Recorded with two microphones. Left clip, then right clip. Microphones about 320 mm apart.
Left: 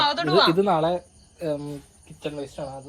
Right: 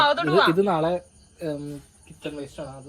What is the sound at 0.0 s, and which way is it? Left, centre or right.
Speech, centre.